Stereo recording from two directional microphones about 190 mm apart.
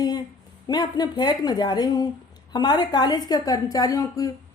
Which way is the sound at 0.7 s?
20° left (ahead or behind).